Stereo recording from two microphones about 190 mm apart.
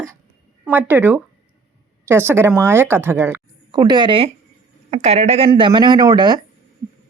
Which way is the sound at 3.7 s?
25° right (ahead or behind).